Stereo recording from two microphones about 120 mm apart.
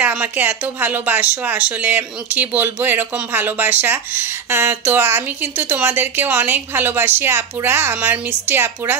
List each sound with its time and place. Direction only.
0.0 s speech: 15° right (ahead or behind)